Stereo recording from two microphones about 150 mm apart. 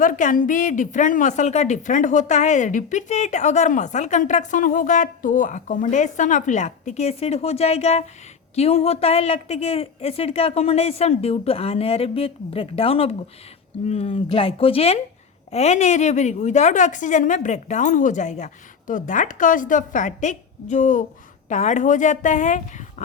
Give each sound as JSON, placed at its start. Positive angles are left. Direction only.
{"t": 0.0, "sound": "a woman's voice", "side_deg": 60}